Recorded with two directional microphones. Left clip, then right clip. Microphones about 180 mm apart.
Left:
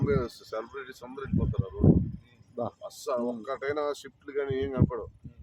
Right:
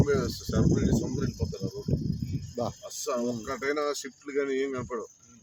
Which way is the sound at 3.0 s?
50° right (ahead or behind).